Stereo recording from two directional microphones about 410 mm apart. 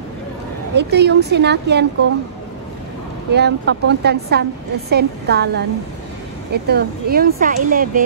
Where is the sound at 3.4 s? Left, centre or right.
Right.